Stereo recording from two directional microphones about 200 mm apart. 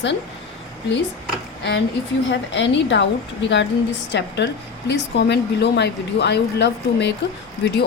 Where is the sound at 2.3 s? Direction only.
65° left (ahead or behind).